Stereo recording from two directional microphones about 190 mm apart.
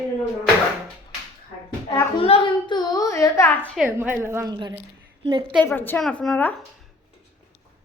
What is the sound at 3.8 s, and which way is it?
A woman's voice, 10° right (ahead or behind).